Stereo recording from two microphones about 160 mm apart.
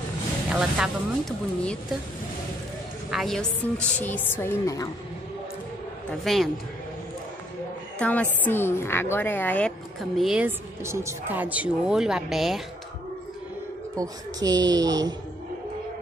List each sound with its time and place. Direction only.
0.5 s speech: 5° right (ahead or behind)
1.6 s a woman's voice: 5° left (ahead or behind)
3.1 s a woman's voice: centre (ahead or behind); by 4.9 s 20° left (ahead or behind)
6.2 s a man's voice: centre (ahead or behind)
8.0 s a woman's voice: 10° left (ahead or behind)
10.8 s a woman's voice: 15° right (ahead or behind); by 12.6 s centre (ahead or behind)
13.9 s a woman's voice: 25° right (ahead or behind)